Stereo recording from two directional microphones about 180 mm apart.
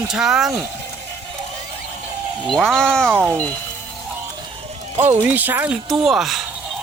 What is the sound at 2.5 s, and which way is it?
Speech, centre (ahead or behind).